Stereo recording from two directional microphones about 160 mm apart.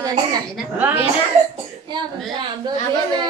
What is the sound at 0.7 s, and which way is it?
Speech, 10° right (ahead or behind).